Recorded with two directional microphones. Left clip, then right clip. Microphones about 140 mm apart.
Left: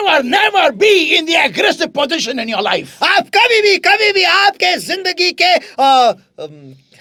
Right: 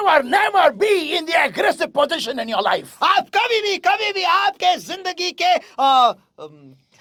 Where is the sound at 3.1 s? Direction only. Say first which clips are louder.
Left 10 dB; 45° left (ahead or behind).